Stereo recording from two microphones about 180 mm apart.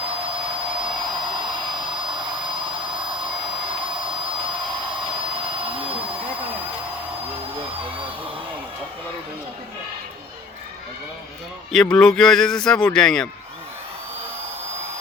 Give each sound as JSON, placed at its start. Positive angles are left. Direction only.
{"t": 0.0, "sound": "hair dryer", "side_deg": -30}
{"t": 4.0, "sound": "a sound", "side_deg": -30}
{"t": 11.7, "sound": "a man's voice", "side_deg": 5}